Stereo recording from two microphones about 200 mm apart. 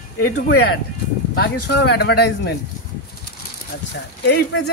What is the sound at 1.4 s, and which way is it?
Speech, 55° left (ahead or behind).